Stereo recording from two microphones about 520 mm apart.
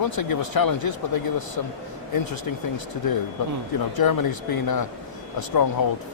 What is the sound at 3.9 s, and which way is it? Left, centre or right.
Speech, left.